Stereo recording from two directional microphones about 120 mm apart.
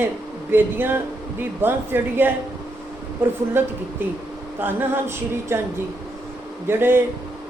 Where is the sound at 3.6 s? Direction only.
20° right (ahead or behind).